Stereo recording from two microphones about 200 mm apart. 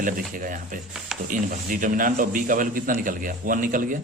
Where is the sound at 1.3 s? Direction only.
40° right (ahead or behind).